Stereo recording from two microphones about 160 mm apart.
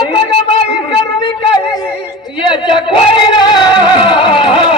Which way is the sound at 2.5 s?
30° left (ahead or behind).